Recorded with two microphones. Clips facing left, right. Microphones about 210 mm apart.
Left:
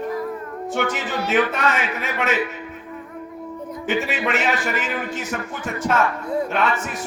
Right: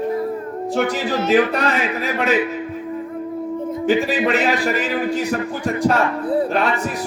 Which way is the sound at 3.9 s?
35° right (ahead or behind).